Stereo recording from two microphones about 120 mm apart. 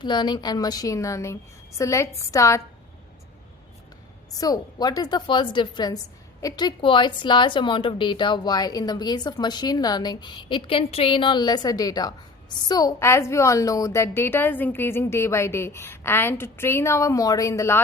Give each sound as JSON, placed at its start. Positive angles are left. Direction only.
{"t": 0.0, "sound": "a woman's voice", "side_deg": 40}
{"t": 4.4, "sound": "a woman's voice", "side_deg": 35}